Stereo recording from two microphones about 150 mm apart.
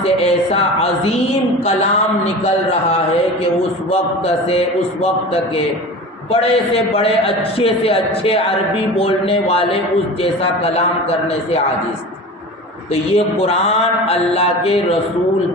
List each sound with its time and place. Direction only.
0.0 s a man's voice: 40° left (ahead or behind)
3.9 s mantra: 40° left (ahead or behind)
6.3 s a man's voice: 40° left (ahead or behind)
12.9 s mantra: 45° left (ahead or behind)